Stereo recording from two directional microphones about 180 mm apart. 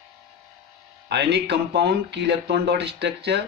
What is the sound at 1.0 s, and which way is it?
Speech, 65° right (ahead or behind).